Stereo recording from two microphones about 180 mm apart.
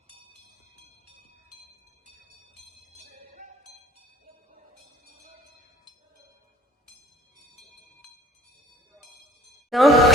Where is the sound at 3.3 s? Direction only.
50° right (ahead or behind).